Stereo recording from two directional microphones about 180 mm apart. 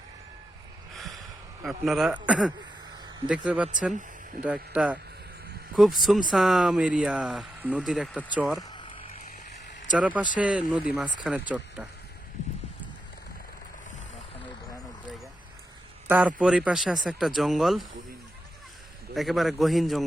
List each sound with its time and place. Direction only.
0.9 s a sound: centre (ahead or behind)
1.6 s speech: centre (ahead or behind)
8.7 s a sound: 25° left (ahead or behind)
10.0 s speech: 10° right (ahead or behind)
16.0 s speech: 10° right (ahead or behind)
19.1 s speech: centre (ahead or behind)